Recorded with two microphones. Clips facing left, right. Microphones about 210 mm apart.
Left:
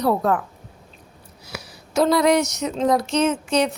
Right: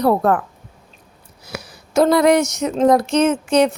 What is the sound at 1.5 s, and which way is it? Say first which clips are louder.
Speech: right 4 dB; 50° right (ahead or behind).